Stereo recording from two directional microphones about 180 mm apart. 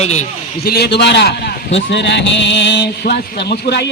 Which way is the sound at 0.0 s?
40° left (ahead or behind).